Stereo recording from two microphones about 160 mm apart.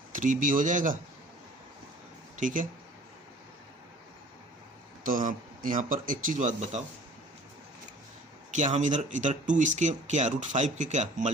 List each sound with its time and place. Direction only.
0.1 s speech: 55° right (ahead or behind)
2.4 s speech: 55° right (ahead or behind)
5.0 s speech: 55° right (ahead or behind)
8.5 s speech: 50° right (ahead or behind)